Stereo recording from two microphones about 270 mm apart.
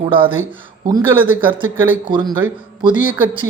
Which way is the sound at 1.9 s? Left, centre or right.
Centre.